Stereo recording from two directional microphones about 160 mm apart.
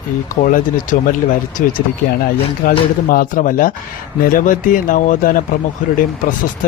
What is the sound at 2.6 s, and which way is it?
Speech, 60° left (ahead or behind).